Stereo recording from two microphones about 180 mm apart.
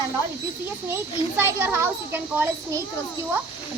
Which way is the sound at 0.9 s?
10° right (ahead or behind).